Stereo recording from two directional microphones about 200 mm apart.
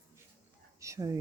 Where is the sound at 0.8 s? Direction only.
15° right (ahead or behind).